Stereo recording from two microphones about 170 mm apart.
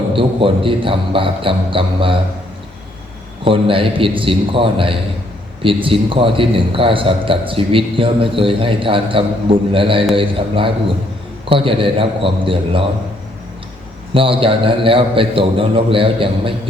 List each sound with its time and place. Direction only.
0.1 s a man's voice: 30° right (ahead or behind)
3.4 s a man's voice: 30° right (ahead or behind)
14.1 s a man's voice: 30° right (ahead or behind)